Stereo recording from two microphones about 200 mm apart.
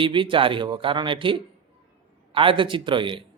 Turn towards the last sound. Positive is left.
turn(degrees=-25)  # may be behind; listen again after turning